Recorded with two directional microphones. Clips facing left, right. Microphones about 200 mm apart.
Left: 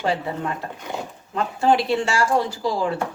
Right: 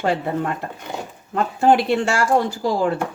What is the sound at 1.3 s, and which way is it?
Speech, 50° right (ahead or behind).